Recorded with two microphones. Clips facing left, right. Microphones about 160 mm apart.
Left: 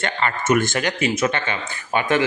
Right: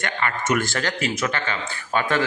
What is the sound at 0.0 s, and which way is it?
A man's voice, 25° left (ahead or behind).